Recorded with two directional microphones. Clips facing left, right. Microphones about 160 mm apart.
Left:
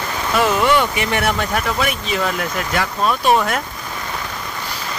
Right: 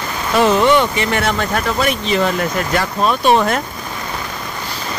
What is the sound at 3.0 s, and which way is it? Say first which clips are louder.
Speech: right 2 dB; 25° right (ahead or behind).